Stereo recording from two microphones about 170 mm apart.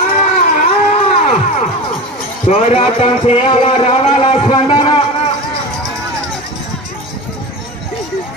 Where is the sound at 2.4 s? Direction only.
35° left (ahead or behind).